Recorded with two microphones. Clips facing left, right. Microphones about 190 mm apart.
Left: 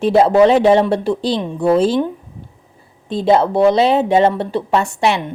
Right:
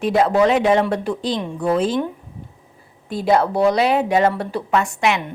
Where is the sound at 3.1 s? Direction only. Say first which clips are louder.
Left 4 dB; 25° left (ahead or behind).